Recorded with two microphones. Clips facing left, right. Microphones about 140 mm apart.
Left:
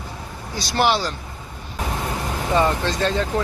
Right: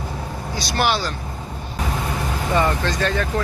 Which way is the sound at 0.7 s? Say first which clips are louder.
Left 2 dB; 25° left (ahead or behind).